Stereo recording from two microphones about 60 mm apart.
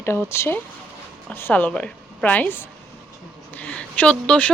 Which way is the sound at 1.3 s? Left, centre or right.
Left.